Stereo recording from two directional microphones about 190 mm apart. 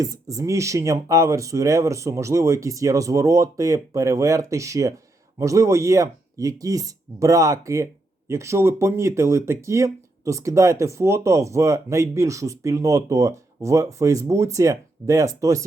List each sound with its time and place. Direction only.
0.0 s speech: 15° right (ahead or behind)